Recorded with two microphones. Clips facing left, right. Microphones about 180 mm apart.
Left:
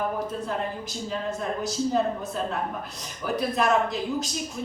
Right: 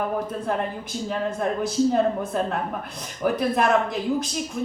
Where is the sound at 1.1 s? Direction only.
55° right (ahead or behind).